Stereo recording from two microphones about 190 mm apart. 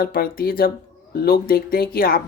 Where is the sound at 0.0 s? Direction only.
50° left (ahead or behind).